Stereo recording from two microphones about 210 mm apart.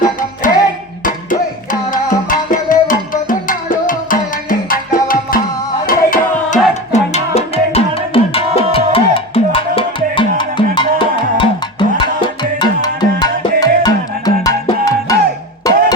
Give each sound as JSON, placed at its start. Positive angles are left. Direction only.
{"t": 0.0, "sound": "music", "side_deg": 40}
{"t": 1.9, "sound": "music", "side_deg": 40}
{"t": 6.9, "sound": "music", "side_deg": 30}